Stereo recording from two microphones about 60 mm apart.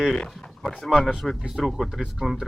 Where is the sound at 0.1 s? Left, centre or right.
Centre.